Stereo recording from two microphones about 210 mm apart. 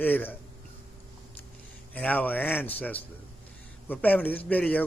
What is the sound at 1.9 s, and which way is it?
A man's voice, 10° left (ahead or behind).